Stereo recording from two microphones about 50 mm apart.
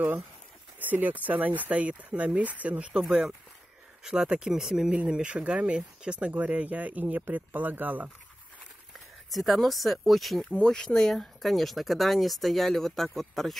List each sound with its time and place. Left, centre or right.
0.7 s speech: right
2.9 s speech: centre; by 8.1 s right
9.3 s speech: centre
10.6 s speech: centre